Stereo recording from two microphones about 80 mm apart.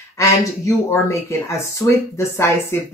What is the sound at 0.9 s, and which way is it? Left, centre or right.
Speech, left.